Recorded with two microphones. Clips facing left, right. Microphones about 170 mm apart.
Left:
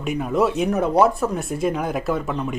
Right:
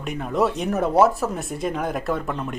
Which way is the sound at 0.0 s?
5° left (ahead or behind).